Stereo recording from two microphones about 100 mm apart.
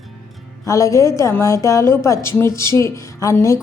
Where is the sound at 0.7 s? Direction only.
30° left (ahead or behind).